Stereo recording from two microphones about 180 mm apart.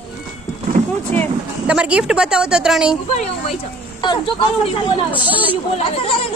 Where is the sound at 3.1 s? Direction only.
35° left (ahead or behind).